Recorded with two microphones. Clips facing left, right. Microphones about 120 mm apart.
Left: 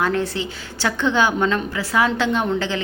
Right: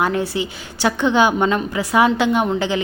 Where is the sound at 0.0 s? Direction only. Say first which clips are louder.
Right 2 dB; 15° right (ahead or behind).